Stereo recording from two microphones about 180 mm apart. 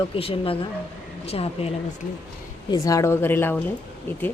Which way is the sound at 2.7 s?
20° left (ahead or behind).